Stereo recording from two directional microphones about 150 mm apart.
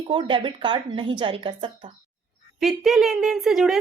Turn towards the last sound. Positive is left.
turn(degrees=0)  # may be behind; listen again after turning